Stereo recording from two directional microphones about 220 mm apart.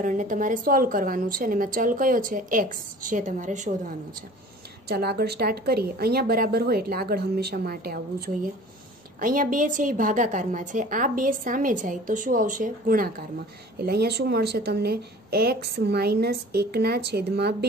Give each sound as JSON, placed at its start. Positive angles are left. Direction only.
{"t": 0.0, "sound": "speech", "side_deg": -35}
{"t": 4.8, "sound": "a woman's voice", "side_deg": -45}